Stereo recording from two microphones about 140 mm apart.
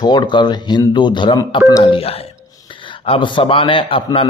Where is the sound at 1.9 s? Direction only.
45° left (ahead or behind).